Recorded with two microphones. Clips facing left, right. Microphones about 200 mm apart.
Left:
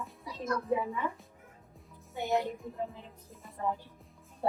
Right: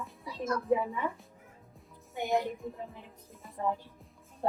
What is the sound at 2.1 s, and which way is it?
Speech, 15° right (ahead or behind).